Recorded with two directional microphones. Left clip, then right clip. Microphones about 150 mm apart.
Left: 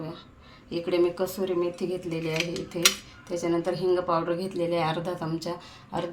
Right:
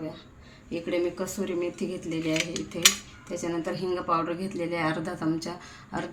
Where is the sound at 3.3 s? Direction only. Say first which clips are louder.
Left 4 dB; 30° left (ahead or behind).